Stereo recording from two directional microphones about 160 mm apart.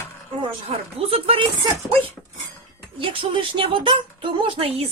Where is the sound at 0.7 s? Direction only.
35° right (ahead or behind).